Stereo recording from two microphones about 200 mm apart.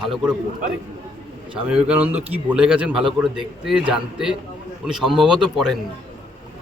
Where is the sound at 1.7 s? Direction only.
10° right (ahead or behind).